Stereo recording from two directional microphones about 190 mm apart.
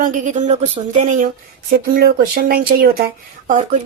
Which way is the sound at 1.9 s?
50° right (ahead or behind).